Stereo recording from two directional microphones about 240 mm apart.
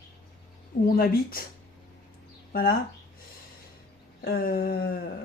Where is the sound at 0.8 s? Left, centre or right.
Left.